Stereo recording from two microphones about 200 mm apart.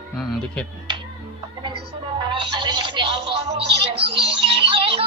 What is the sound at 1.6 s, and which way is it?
Music, 25° right (ahead or behind).